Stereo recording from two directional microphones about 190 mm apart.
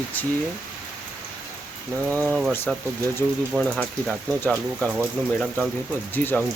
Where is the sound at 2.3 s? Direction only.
5° right (ahead or behind).